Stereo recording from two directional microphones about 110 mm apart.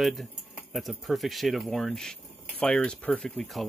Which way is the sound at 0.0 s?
Centre (ahead or behind).